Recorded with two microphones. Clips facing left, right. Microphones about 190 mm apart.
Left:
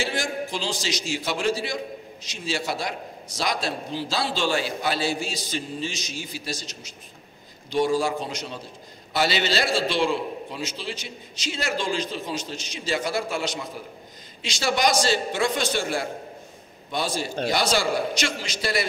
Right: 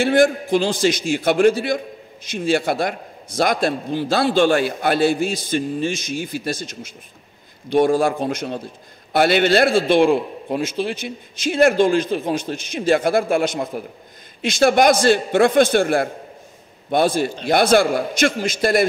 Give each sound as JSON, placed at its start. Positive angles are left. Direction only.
{"t": 0.0, "sound": "a man's voice", "side_deg": -55}